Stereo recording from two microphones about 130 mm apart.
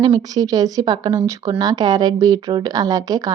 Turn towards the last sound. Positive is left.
turn(degrees=-30)  # may be behind; listen again after turning